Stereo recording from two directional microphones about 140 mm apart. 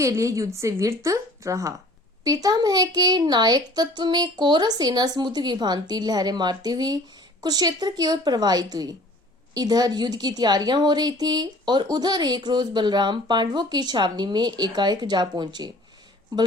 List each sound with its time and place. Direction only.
0.0 s a woman's voice: 20° right (ahead or behind)